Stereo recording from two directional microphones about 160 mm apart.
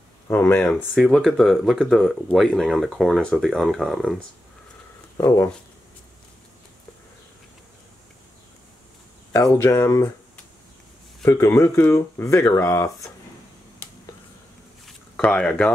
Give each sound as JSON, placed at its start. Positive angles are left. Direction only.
{"t": 0.3, "sound": "speech", "side_deg": 10}
{"t": 5.1, "sound": "speech", "side_deg": 20}
{"t": 9.6, "sound": "speech", "side_deg": 15}
{"t": 14.9, "sound": "a sound", "side_deg": 5}